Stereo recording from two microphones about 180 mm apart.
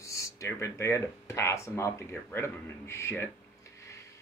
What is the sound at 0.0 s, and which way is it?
Speech, 15° left (ahead or behind).